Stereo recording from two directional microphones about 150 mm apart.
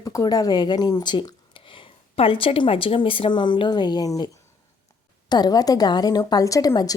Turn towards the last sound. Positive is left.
turn(degrees=25)  # may be behind; listen again after turning